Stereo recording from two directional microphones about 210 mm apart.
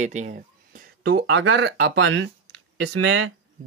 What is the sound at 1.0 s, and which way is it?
Speech, 70° right (ahead or behind).